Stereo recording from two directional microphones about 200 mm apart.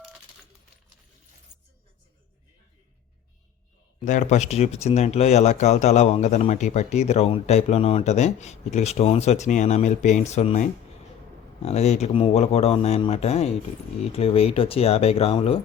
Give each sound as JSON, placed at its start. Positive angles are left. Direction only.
{"t": 4.0, "sound": "speech", "side_deg": 40}